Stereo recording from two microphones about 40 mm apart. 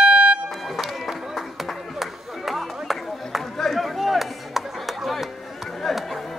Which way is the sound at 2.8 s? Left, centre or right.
Centre.